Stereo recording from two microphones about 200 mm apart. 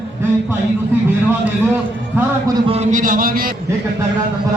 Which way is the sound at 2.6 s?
30° right (ahead or behind).